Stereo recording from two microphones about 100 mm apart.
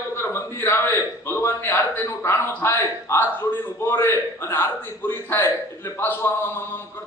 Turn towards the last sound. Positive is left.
turn(degrees=20)  # may be behind; listen again after turning